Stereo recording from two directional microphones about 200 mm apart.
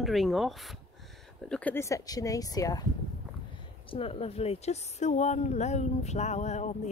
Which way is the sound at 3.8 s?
30° left (ahead or behind).